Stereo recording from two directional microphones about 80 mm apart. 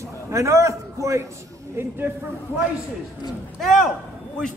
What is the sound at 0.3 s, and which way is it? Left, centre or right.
Speech, right.